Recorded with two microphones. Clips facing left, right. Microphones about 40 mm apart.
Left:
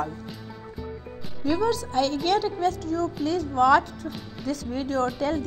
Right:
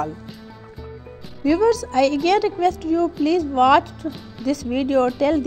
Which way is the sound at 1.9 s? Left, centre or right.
Right.